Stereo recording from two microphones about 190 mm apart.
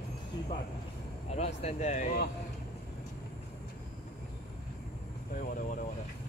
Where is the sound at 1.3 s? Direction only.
35° left (ahead or behind).